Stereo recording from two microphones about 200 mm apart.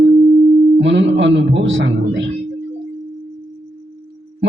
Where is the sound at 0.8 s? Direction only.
65° right (ahead or behind).